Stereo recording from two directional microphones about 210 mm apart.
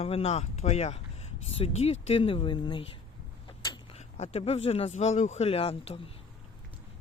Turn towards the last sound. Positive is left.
turn(degrees=25)  # may be behind; listen again after turning